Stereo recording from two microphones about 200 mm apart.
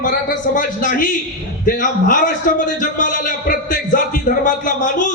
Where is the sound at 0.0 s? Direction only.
40° left (ahead or behind).